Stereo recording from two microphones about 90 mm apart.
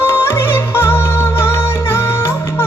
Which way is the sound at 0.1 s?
25° left (ahead or behind).